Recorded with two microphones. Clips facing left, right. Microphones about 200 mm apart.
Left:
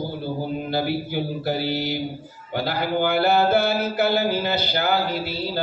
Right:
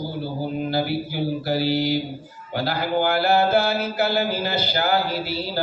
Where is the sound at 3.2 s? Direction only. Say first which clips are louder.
Left 1 dB; 55° left (ahead or behind).